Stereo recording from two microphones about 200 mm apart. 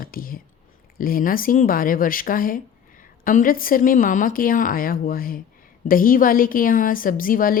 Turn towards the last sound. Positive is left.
turn(degrees=45)  # may be behind; listen again after turning